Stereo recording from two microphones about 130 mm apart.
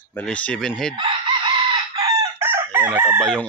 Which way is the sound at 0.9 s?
40° right (ahead or behind).